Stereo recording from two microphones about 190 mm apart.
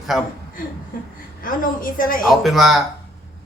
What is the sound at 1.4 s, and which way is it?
Speech, 45° left (ahead or behind).